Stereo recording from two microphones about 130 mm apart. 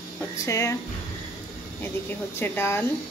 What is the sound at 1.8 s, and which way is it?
Speech, 15° left (ahead or behind).